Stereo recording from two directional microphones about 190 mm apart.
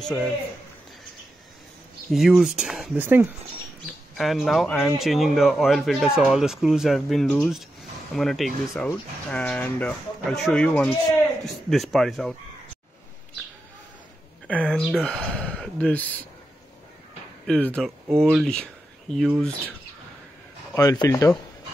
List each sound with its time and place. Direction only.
2.0 s speech: centre (ahead or behind)
14.5 s speech: 5° left (ahead or behind)
17.5 s speech: 5° left (ahead or behind)
20.7 s speech: 20° left (ahead or behind)